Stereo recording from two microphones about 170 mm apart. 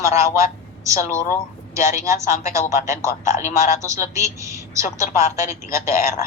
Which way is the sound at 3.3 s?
45° left (ahead or behind).